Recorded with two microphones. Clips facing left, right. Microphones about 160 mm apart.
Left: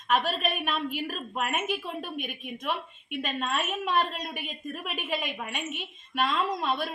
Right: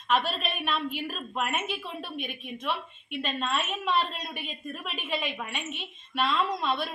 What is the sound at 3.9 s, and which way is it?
Speech, 50° left (ahead or behind).